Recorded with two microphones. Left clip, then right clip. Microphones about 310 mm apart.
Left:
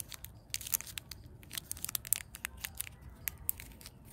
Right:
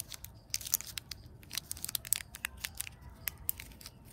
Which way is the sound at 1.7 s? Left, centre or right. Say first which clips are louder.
Right 1 dB; centre.